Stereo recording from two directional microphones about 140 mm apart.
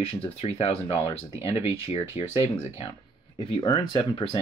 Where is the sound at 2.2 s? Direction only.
45° left (ahead or behind).